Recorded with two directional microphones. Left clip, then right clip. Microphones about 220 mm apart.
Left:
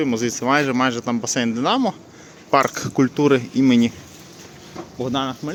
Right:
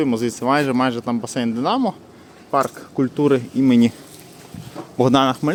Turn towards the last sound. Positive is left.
turn(degrees=-40)  # may be behind; listen again after turning